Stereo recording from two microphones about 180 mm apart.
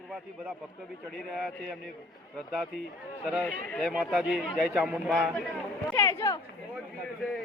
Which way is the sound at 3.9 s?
5° right (ahead or behind).